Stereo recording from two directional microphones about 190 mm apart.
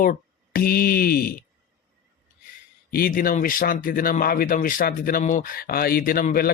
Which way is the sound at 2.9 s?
50° left (ahead or behind).